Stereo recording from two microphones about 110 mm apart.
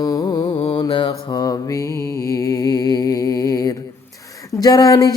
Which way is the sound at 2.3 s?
30° left (ahead or behind).